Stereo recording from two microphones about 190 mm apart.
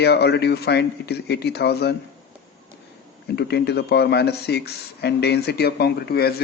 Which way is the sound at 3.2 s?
60° left (ahead or behind).